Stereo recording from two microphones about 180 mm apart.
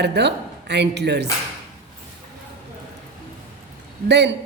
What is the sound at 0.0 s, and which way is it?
Speech, 70° right (ahead or behind).